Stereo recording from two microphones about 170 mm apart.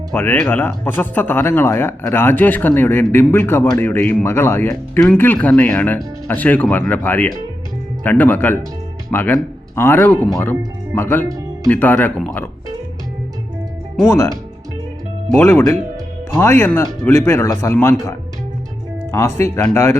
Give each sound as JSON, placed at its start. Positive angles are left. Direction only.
{"t": 0.1, "sound": "speech", "side_deg": 10}
{"t": 11.3, "sound": "music", "side_deg": -20}
{"t": 11.7, "sound": "speech", "side_deg": 10}
{"t": 15.4, "sound": "speech", "side_deg": 15}
{"t": 19.1, "sound": "speech", "side_deg": 15}